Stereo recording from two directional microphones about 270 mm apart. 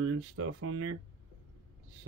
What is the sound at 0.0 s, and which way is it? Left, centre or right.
Speech, right.